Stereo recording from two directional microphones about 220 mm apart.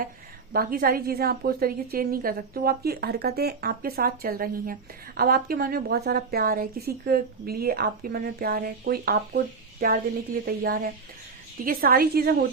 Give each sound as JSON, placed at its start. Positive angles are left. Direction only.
{"t": 0.5, "sound": "a woman's voice", "side_deg": -40}